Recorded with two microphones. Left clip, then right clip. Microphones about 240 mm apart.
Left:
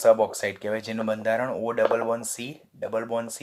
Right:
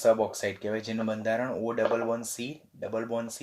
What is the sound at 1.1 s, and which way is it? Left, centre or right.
Speech, centre.